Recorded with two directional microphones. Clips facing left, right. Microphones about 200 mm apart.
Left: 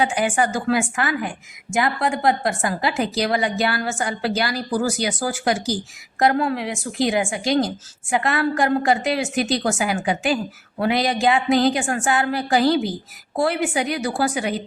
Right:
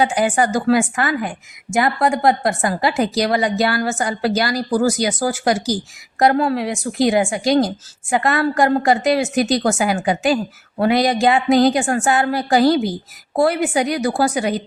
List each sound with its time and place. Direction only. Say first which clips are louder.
0.0 s a woman's voice: right 3 dB; 40° right (ahead or behind)